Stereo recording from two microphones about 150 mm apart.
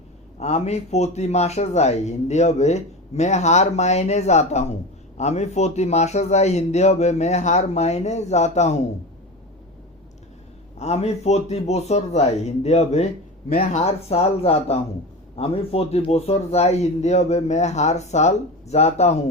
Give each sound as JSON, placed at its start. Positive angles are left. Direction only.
{"t": 0.3, "sound": "a man's voice", "side_deg": 45}
{"t": 10.8, "sound": "a man's voice", "side_deg": 45}